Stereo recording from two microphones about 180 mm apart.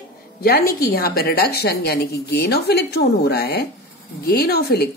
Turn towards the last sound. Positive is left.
turn(degrees=60)  # may be behind; listen again after turning